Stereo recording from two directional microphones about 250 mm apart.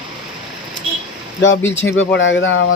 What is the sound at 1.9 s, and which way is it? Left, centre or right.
Speech, left.